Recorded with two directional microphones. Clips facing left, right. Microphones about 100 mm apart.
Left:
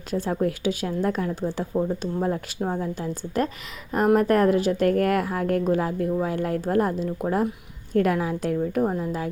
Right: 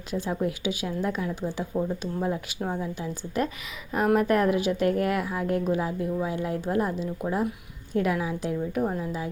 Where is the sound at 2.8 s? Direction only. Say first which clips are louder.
Left 3 dB; 40° left (ahead or behind).